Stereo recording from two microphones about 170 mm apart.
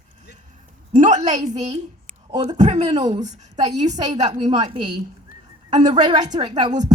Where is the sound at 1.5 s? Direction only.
40° right (ahead or behind).